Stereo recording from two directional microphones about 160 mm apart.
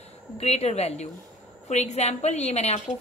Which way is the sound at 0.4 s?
40° left (ahead or behind).